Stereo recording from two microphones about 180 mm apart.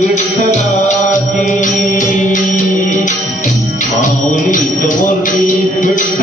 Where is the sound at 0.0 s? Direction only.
40° left (ahead or behind).